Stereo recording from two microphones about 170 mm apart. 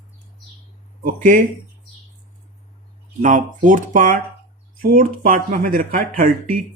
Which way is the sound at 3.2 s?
50° right (ahead or behind).